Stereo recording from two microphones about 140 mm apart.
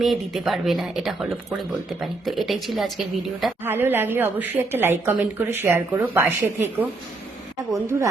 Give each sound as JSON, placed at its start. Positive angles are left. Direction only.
{"t": 0.0, "sound": "speech", "side_deg": 0}
{"t": 3.6, "sound": "a woman's voice", "side_deg": -15}
{"t": 7.9, "sound": "speech", "side_deg": -20}